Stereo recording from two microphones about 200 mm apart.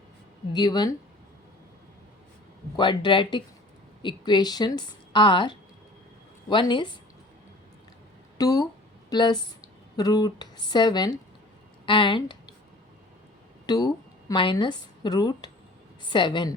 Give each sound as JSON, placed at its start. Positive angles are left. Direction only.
{"t": 0.5, "sound": "a woman's voice", "side_deg": 20}
{"t": 2.7, "sound": "a woman's voice", "side_deg": 25}
{"t": 8.4, "sound": "a woman's voice", "side_deg": 20}
{"t": 13.7, "sound": "a woman's voice", "side_deg": 20}